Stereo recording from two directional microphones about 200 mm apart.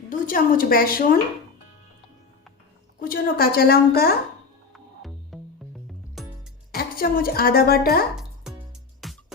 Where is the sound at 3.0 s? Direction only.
45° left (ahead or behind).